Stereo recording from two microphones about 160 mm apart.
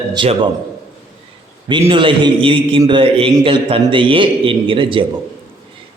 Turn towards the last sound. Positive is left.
turn(degrees=-30)  # may be behind; listen again after turning